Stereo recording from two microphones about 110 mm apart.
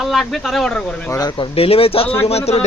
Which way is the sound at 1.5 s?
60° left (ahead or behind).